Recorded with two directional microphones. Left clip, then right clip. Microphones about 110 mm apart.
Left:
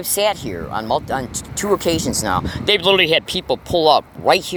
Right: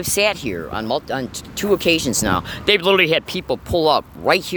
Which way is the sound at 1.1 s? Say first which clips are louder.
Left 2 dB; 35° right (ahead or behind).